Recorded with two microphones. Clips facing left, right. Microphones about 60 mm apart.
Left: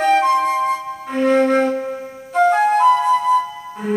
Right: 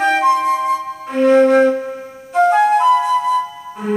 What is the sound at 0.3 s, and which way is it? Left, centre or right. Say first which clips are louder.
Flute: right 2 dB; centre.